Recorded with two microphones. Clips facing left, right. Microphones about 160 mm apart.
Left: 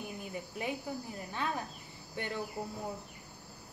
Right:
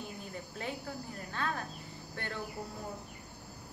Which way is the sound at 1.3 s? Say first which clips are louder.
Even; 15° left (ahead or behind).